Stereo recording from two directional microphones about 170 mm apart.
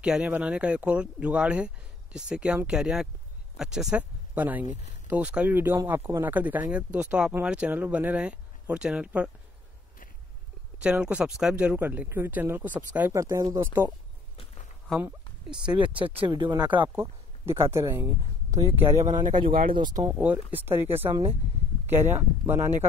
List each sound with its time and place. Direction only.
0.0 s speech: 5° right (ahead or behind)
10.8 s speech: 5° right (ahead or behind)
14.3 s a sound: 35° left (ahead or behind)
15.0 s speech: 10° right (ahead or behind)
16.0 s speech: 30° right (ahead or behind)
16.9 s speech: 15° right (ahead or behind)
19.1 s speech: 25° right (ahead or behind)